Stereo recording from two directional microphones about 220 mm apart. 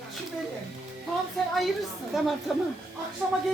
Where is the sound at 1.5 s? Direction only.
Centre (ahead or behind).